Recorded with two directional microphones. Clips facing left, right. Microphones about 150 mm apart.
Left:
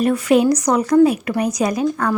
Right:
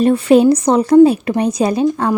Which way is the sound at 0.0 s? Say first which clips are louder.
Right 5 dB; 30° right (ahead or behind).